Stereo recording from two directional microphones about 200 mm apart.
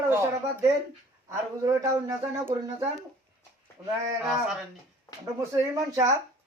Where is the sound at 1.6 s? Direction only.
20° right (ahead or behind).